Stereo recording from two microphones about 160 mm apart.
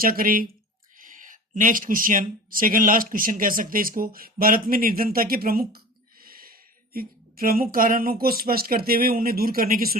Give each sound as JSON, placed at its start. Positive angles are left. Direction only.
{"t": 0.0, "sound": "speech", "side_deg": -65}